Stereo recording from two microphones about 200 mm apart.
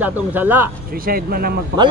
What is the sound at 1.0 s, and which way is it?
Speech, 50° right (ahead or behind).